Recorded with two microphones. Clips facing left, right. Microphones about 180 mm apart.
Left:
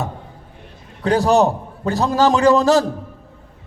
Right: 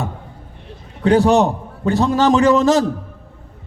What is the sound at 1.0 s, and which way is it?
A man's voice, 35° left (ahead or behind).